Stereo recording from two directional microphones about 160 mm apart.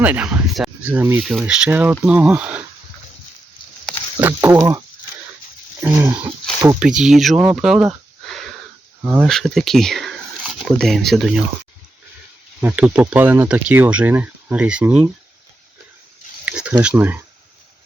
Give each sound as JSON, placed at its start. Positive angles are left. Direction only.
{"t": 0.0, "sound": "speech", "side_deg": -10}
{"t": 4.2, "sound": "speech", "side_deg": -15}
{"t": 5.8, "sound": "speech", "side_deg": -15}
{"t": 7.3, "sound": "a sound", "side_deg": -5}
{"t": 9.2, "sound": "speech", "side_deg": 0}
{"t": 12.6, "sound": "speech", "side_deg": -10}
{"t": 16.5, "sound": "speech", "side_deg": -5}